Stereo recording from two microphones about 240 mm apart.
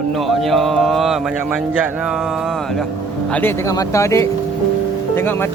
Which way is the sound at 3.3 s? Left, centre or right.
Centre.